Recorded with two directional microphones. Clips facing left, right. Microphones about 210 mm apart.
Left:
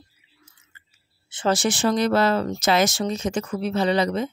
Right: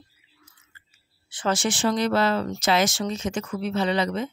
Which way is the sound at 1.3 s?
30° left (ahead or behind).